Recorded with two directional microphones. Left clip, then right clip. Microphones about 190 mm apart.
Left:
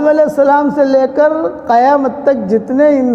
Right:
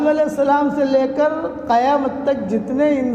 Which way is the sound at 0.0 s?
50° left (ahead or behind).